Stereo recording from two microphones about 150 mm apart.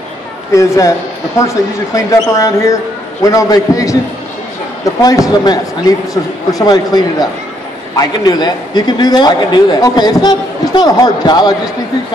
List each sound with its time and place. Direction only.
0.5 s a man's voice: 20° left (ahead or behind)
5.0 s a man's voice: 25° left (ahead or behind)